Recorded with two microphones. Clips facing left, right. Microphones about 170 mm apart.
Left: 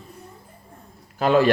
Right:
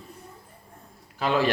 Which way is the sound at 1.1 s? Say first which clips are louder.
Left 7 dB; 50° left (ahead or behind).